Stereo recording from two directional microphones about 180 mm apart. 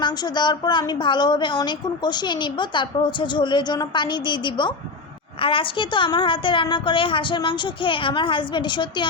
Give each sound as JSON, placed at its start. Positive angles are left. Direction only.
{"t": 0.0, "sound": "a woman's voice", "side_deg": 25}